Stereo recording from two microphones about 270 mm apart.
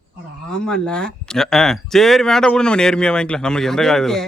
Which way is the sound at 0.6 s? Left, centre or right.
Centre.